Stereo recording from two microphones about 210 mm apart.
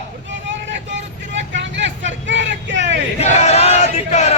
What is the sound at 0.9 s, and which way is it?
Vehicle, 60° right (ahead or behind).